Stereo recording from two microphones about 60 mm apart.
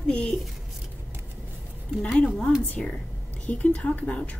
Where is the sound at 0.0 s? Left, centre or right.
Centre.